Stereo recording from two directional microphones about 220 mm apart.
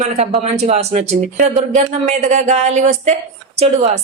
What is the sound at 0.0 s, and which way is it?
A woman's voice, 30° right (ahead or behind).